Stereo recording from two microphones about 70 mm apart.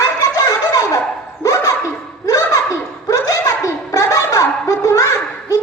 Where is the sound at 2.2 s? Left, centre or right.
Left.